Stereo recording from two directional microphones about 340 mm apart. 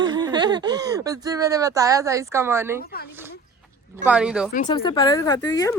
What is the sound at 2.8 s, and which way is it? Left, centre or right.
Speech, left.